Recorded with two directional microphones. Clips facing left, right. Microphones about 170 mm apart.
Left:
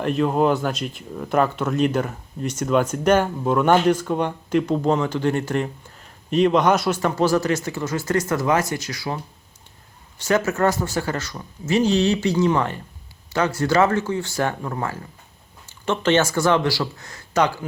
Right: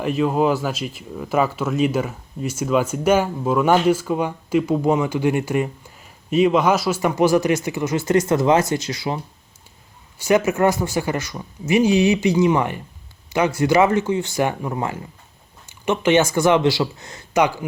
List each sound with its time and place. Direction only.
0.0 s speech: 5° right (ahead or behind)